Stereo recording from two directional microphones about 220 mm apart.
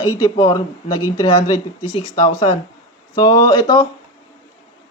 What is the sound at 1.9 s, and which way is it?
Speech, 25° left (ahead or behind).